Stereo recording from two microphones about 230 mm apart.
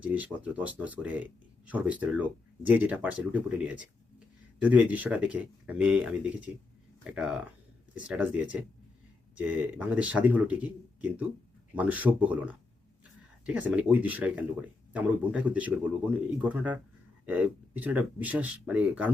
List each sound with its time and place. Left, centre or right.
0.0 s speech: centre